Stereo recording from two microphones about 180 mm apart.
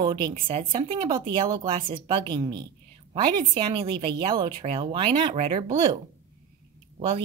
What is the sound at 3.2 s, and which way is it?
A woman's voice, 25° right (ahead or behind).